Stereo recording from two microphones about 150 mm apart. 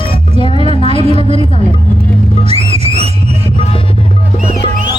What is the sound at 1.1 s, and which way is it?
Speech, 45° right (ahead or behind).